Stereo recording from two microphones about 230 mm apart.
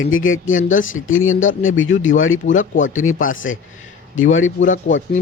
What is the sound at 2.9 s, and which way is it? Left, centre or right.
Speech, left.